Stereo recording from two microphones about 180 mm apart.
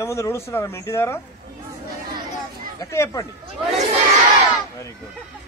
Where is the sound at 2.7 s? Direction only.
15° left (ahead or behind).